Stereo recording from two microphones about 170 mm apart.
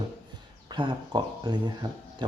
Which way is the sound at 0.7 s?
25° right (ahead or behind).